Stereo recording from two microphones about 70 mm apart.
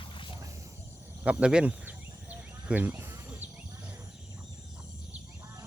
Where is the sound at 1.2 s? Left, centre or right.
Centre.